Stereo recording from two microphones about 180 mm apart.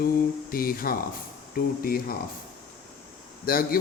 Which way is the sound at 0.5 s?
55° left (ahead or behind).